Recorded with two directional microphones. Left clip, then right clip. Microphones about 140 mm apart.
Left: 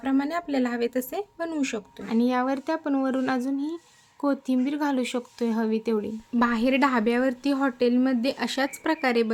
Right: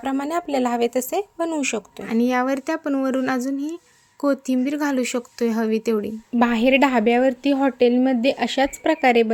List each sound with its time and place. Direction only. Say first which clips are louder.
0.0 s speech: right 3 dB; 15° right (ahead or behind)